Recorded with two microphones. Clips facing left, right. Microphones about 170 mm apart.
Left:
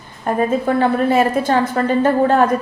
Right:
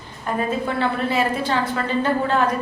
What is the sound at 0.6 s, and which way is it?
A woman's voice, 45° left (ahead or behind).